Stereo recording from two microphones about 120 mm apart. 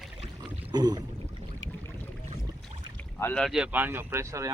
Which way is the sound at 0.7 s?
35° right (ahead or behind).